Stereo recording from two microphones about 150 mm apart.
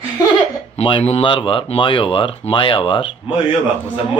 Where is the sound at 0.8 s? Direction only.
40° left (ahead or behind).